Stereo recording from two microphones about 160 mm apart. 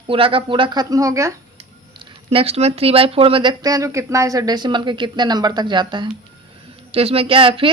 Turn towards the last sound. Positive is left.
turn(degrees=-35)  # may be behind; listen again after turning